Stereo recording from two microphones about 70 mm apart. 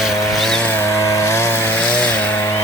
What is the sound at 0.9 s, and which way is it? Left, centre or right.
Chainsaw, left.